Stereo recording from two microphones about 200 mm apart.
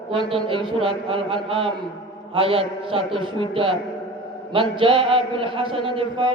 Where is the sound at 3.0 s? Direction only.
Centre (ahead or behind).